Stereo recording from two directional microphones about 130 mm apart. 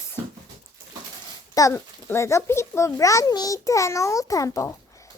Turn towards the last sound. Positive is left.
turn(degrees=25)  # may be behind; listen again after turning